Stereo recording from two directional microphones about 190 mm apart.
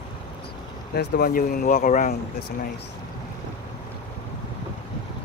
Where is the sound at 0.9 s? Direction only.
50° left (ahead or behind).